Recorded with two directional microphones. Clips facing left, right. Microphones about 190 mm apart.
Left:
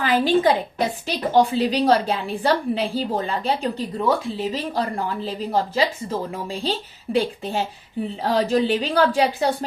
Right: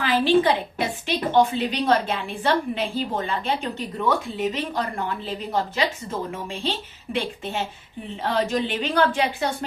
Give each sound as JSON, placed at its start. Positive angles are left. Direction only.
{"t": 0.0, "sound": "a woman's voice", "side_deg": 40}